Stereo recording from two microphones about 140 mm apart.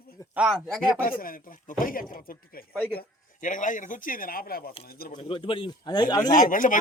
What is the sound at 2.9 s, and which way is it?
A man's voice, 70° left (ahead or behind).